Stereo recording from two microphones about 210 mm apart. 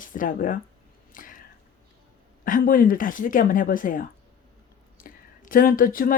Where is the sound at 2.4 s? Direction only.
40° left (ahead or behind).